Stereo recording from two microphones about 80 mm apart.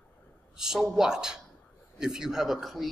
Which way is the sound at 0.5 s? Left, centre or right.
Centre.